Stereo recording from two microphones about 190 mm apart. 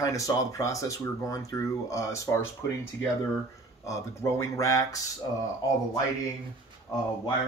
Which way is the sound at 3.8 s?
15° left (ahead or behind).